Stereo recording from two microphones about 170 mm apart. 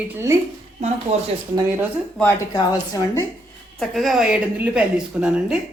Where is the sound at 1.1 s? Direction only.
40° right (ahead or behind).